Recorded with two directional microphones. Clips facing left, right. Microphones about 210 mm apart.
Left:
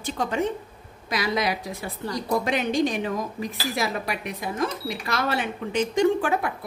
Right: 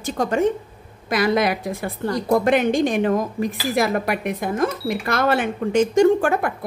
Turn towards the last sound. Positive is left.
turn(degrees=-50)  # may be behind; listen again after turning